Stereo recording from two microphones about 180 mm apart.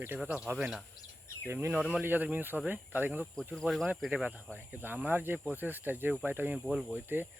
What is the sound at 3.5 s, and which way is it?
Speech, centre (ahead or behind).